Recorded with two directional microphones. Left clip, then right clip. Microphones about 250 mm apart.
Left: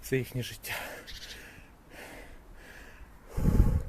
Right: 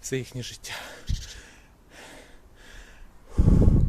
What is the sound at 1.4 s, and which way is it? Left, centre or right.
Gasp, centre.